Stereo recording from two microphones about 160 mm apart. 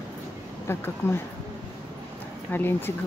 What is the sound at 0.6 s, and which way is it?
Speech, 15° left (ahead or behind).